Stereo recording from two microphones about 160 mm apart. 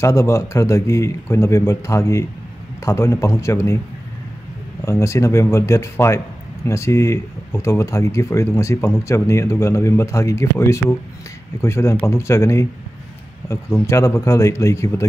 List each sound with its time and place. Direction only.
0.0 s speech: 20° left (ahead or behind)
4.8 s speech: 20° left (ahead or behind)